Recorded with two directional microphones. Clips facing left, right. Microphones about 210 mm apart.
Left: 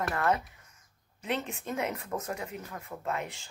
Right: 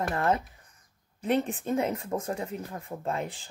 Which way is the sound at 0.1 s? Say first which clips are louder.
Right 2 dB; 30° right (ahead or behind).